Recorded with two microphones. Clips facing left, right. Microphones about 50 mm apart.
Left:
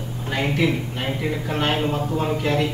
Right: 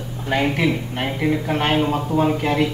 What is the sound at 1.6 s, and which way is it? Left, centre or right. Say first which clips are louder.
Speech: right 2 dB; right.